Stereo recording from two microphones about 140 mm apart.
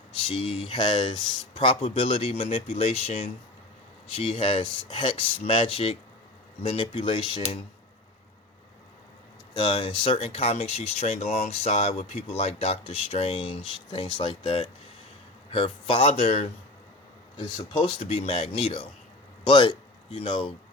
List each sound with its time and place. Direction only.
0.3 s speech: 40° left (ahead or behind)
9.6 s speech: 40° left (ahead or behind)